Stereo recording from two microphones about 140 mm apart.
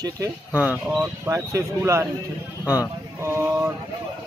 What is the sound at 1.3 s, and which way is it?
Speech, 20° right (ahead or behind).